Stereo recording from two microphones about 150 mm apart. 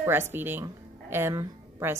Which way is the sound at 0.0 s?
15° right (ahead or behind).